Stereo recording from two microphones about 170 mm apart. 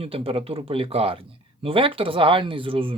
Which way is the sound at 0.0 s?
35° right (ahead or behind).